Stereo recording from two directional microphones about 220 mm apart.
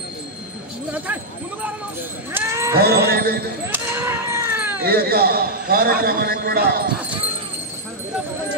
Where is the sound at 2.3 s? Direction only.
10° right (ahead or behind).